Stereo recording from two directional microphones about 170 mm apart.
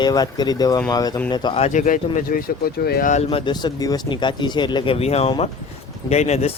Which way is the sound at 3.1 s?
35° left (ahead or behind).